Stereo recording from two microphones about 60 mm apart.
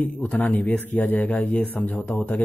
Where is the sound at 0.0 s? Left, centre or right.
Left.